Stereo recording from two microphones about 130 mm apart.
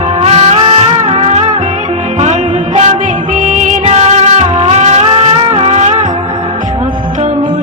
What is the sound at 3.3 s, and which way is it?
Music, 70° right (ahead or behind).